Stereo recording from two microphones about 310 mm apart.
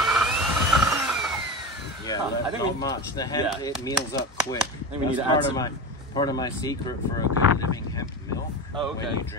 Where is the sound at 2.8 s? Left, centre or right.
Centre.